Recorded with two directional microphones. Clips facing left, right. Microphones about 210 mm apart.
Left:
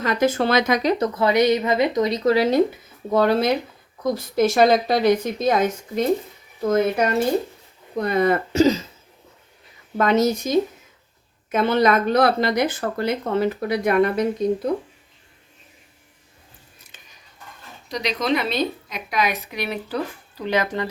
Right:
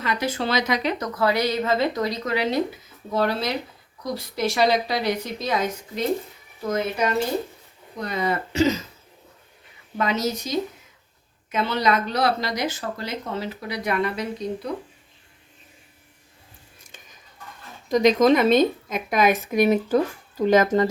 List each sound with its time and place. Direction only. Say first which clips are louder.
0.0 s a woman's voice: left 6 dB; 45° left (ahead or behind); by 2.1 s 20° left (ahead or behind)
2.2 s speech: left 9 dB; 40° left (ahead or behind)
3.1 s speech: left 6 dB; 50° left (ahead or behind)
8.0 s speech: left 6 dB; 55° left (ahead or behind)
8.6 s speech: left 2 dB; 30° left (ahead or behind)
10.0 s speech: left 6 dB; 55° left (ahead or behind)
17.8 s a woman's voice: right 7 dB; 50° right (ahead or behind)